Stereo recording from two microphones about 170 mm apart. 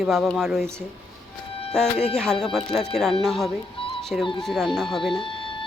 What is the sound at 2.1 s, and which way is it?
Speech, 5° left (ahead or behind).